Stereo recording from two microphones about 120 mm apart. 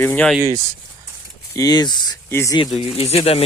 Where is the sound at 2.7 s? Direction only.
55° left (ahead or behind).